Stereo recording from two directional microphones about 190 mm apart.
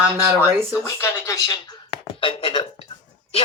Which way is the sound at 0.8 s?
15° left (ahead or behind).